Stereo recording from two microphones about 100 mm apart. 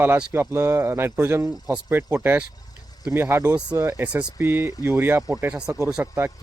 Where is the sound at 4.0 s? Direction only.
20° right (ahead or behind).